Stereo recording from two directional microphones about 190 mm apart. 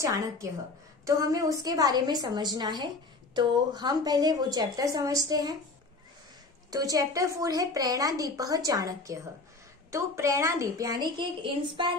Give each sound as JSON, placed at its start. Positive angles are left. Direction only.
{"t": 0.0, "sound": "a woman's voice", "side_deg": -15}
{"t": 6.7, "sound": "a woman's voice", "side_deg": -20}